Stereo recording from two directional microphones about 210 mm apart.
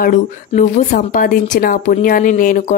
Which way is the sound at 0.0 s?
40° left (ahead or behind).